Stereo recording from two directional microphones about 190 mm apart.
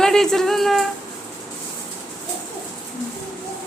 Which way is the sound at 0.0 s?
Centre (ahead or behind).